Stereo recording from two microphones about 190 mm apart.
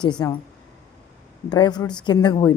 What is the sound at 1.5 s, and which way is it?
Speech, 25° left (ahead or behind).